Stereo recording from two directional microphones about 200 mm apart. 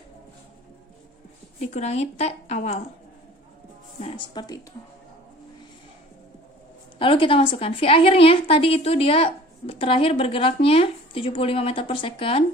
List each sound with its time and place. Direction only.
1.7 s speech: 35° left (ahead or behind)
4.0 s a woman's voice: 20° left (ahead or behind)
7.0 s a woman's voice: 25° left (ahead or behind)